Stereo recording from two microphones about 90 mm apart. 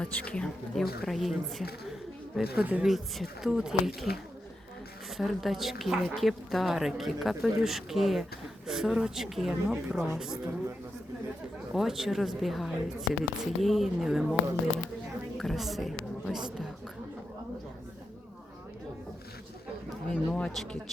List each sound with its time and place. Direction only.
0.0 s speech: 10° left (ahead or behind)
2.6 s speech: 15° right (ahead or behind)
2.8 s speech: centre (ahead or behind)
5.1 s speech: centre (ahead or behind)
11.7 s speech: 5° right (ahead or behind)
15.4 s a woman's voice: centre (ahead or behind)
20.3 s speech: 5° left (ahead or behind)